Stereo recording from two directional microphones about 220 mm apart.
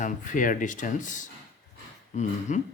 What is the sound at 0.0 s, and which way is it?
Speech, 35° left (ahead or behind).